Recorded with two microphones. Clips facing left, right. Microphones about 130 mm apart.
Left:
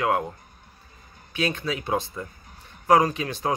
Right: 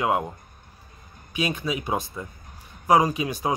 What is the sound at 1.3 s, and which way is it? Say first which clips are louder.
Speech: even; 15° right (ahead or behind).